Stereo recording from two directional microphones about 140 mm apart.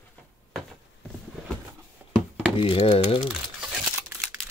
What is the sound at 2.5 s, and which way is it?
Speech, 40° left (ahead or behind).